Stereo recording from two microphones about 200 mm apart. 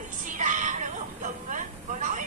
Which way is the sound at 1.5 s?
40° right (ahead or behind).